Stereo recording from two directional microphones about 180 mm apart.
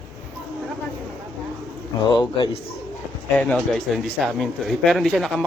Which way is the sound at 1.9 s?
20° left (ahead or behind).